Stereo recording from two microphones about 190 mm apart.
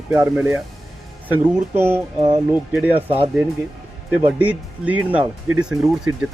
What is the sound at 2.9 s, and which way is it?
Speech, 30° right (ahead or behind).